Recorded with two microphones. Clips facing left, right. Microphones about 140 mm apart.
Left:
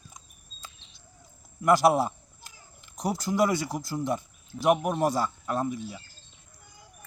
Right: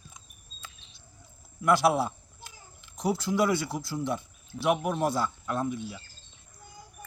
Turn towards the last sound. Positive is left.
turn(degrees=40)  # may be behind; listen again after turning